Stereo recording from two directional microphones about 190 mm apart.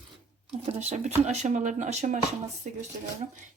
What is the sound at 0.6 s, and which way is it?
Speech, 35° right (ahead or behind).